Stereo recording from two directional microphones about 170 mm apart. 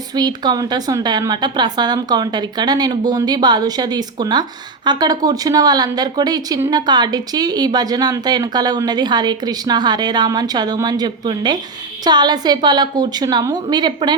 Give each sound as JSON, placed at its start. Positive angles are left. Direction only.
{"t": 0.2, "sound": "speech", "side_deg": -25}